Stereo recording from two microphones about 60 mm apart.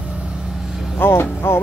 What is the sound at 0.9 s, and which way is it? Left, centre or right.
Speech, left.